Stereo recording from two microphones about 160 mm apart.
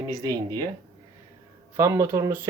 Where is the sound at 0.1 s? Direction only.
20° right (ahead or behind).